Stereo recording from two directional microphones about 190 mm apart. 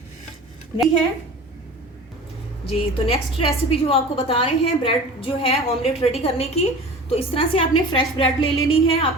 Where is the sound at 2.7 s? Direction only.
30° left (ahead or behind).